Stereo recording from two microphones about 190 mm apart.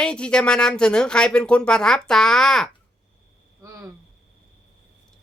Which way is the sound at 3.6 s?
15° right (ahead or behind).